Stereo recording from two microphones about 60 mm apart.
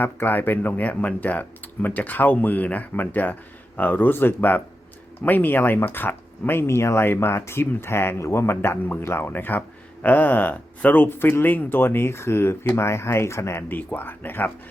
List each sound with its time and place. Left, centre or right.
0.0 s speech: left
13.7 s speech: left